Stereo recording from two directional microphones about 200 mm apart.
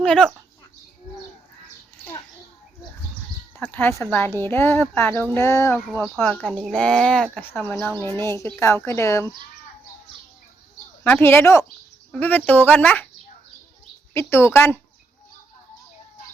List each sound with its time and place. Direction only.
0.0 s speech: 5° left (ahead or behind)
3.6 s speech: 10° left (ahead or behind)
11.0 s speech: 10° left (ahead or behind)
14.1 s speech: 10° left (ahead or behind)